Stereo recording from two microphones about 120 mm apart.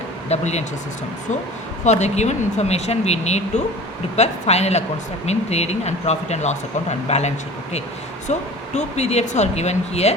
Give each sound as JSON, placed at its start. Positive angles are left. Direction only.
{"t": 0.3, "sound": "speech", "side_deg": 65}
{"t": 1.8, "sound": "speech", "side_deg": 70}